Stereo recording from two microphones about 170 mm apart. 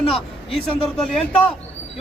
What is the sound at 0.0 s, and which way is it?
Speech, 30° left (ahead or behind).